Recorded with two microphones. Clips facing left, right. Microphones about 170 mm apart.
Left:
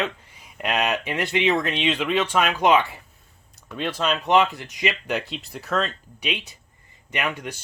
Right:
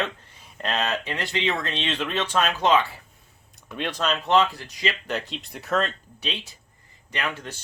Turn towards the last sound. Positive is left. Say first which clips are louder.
# left 3 dB
turn(degrees=15)  # may be behind; listen again after turning